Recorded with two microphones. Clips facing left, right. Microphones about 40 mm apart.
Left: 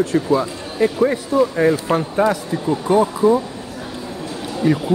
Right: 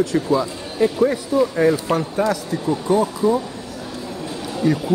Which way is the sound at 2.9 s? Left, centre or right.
Left.